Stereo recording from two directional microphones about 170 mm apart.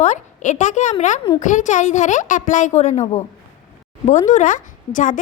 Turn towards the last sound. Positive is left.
turn(degrees=50)  # may be behind; listen again after turning